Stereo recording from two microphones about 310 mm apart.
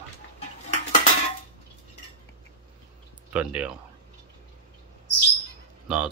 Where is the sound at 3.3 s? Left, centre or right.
Centre.